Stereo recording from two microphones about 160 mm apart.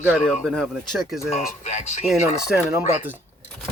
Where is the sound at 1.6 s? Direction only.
45° left (ahead or behind).